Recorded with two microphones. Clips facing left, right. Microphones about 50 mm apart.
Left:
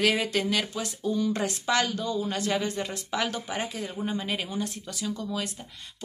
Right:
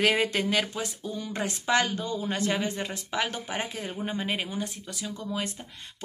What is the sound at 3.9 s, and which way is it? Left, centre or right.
A woman's voice, right.